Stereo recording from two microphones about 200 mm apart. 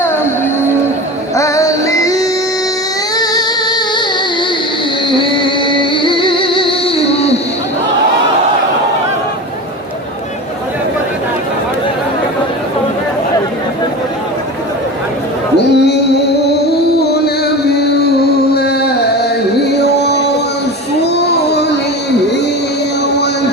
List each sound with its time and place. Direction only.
1.4 s music: 15° left (ahead or behind)
5.1 s music: 25° left (ahead or behind)
15.5 s music: 55° left (ahead or behind)
21.0 s child singing: 55° left (ahead or behind)